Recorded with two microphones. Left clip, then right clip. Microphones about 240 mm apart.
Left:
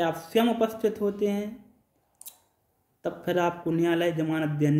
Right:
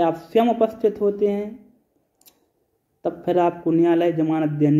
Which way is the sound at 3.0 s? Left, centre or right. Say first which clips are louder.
Right 7 dB; centre.